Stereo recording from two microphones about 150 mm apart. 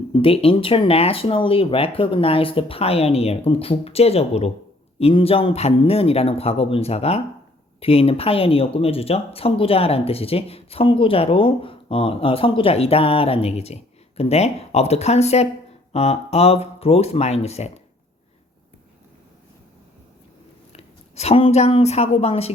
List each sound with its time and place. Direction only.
0.1 s speech: 40° left (ahead or behind)
20.7 s speech: 45° left (ahead or behind)